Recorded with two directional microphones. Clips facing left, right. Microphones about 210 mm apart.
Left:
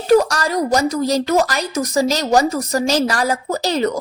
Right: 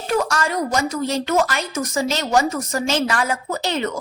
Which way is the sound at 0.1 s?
35° left (ahead or behind).